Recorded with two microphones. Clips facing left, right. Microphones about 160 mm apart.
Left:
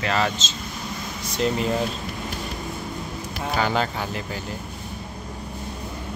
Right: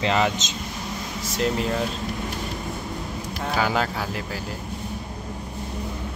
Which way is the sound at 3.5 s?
5° right (ahead or behind).